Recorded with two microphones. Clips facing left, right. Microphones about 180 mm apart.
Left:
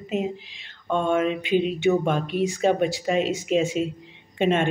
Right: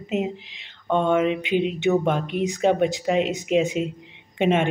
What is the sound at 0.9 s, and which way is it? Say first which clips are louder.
A woman's voice: right 2 dB; 15° right (ahead or behind).